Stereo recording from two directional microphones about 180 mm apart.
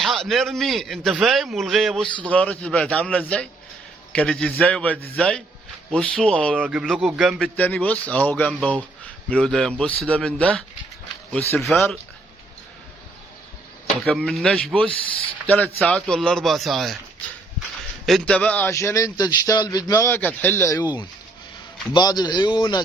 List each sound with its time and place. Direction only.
0.0 s a man's voice: centre (ahead or behind)
6.6 s a man's voice: 5° right (ahead or behind)
14.0 s a man's voice: centre (ahead or behind)
18.0 s a man's voice: 5° left (ahead or behind)
21.9 s speech: 20° left (ahead or behind)